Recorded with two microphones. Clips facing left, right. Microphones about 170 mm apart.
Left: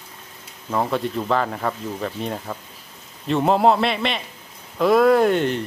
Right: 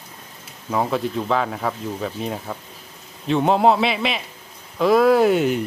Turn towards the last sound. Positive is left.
turn(degrees=-5)  # may be behind; listen again after turning